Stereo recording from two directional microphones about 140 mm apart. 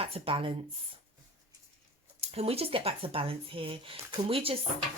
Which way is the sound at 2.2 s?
45° right (ahead or behind).